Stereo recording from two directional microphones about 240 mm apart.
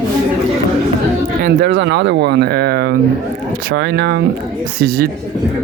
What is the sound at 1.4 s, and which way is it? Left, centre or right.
Speech, right.